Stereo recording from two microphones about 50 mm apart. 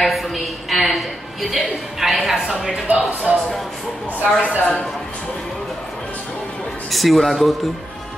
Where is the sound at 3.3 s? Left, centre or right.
Centre.